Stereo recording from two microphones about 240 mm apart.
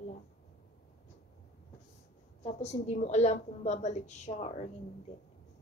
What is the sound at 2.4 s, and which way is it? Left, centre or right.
A woman's voice, left.